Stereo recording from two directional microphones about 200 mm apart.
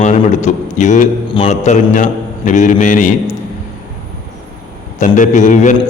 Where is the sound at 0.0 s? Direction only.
35° left (ahead or behind).